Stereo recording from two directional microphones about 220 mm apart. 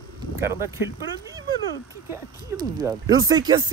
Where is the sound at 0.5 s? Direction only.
15° right (ahead or behind).